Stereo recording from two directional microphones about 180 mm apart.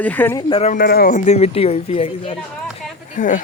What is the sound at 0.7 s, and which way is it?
Speech, 55° left (ahead or behind).